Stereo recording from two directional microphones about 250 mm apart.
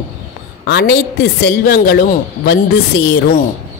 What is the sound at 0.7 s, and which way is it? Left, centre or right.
A woman's voice, left.